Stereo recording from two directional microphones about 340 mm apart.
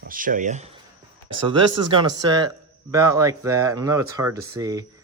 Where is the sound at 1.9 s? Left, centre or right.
Centre.